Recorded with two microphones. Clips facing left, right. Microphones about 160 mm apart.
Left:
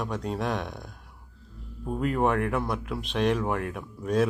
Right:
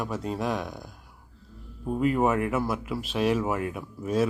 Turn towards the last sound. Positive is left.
turn(degrees=0)  # may be behind; listen again after turning